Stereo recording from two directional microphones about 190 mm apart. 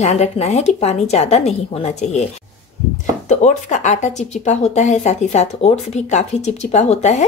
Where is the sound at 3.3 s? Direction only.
40° left (ahead or behind).